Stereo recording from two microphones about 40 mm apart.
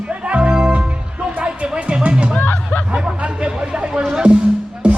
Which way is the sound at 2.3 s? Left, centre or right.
Left.